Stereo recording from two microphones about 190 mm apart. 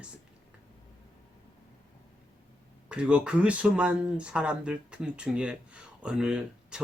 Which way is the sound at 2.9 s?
5° right (ahead or behind).